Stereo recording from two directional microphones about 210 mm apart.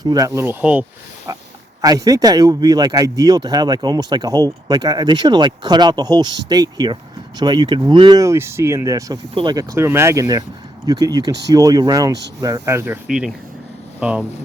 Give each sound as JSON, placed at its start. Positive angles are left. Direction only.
{"t": 0.0, "sound": "speech", "side_deg": -15}